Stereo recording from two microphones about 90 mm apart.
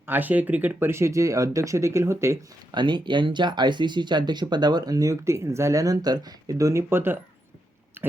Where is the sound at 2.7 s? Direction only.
60° right (ahead or behind).